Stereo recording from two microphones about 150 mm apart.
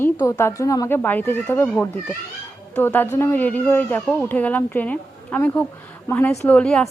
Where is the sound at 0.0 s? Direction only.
15° left (ahead or behind).